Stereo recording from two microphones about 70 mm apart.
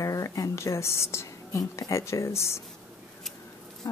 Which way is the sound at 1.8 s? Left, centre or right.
Left.